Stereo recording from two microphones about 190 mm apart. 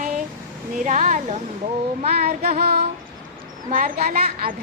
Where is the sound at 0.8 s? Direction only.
40° right (ahead or behind).